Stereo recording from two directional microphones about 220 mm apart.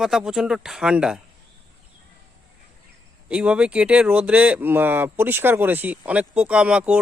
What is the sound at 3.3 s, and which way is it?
Speech, 5° right (ahead or behind).